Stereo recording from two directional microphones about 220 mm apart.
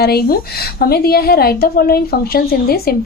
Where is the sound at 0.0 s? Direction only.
45° left (ahead or behind).